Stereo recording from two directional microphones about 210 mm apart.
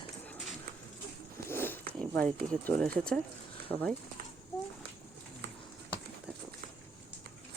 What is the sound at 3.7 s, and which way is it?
Speech, 5° left (ahead or behind).